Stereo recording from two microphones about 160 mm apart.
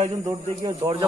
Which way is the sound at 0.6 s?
30° right (ahead or behind).